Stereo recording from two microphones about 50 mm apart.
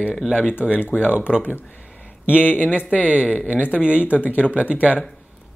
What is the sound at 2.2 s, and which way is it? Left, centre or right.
A man's voice, left.